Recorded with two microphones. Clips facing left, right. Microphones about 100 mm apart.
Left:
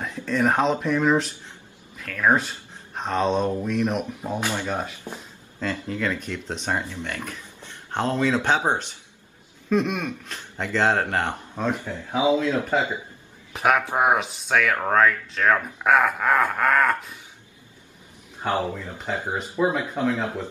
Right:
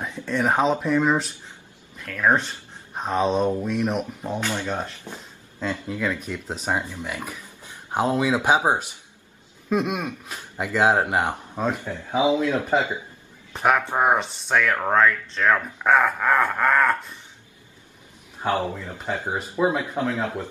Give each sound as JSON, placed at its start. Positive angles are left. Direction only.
{"t": 0.0, "sound": "speech", "side_deg": 0}
{"t": 4.3, "sound": "speech", "side_deg": 15}
{"t": 5.6, "sound": "speech", "side_deg": -5}
{"t": 13.5, "sound": "speech", "side_deg": 5}
{"t": 18.6, "sound": "speech", "side_deg": -25}
{"t": 19.6, "sound": "speech", "side_deg": -5}